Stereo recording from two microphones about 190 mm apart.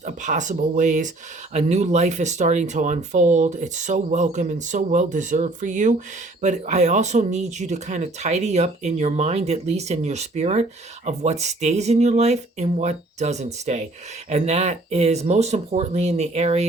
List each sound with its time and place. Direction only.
0.0 s speech: 40° right (ahead or behind)